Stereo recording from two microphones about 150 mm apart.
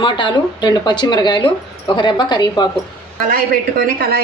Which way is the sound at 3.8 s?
80° right.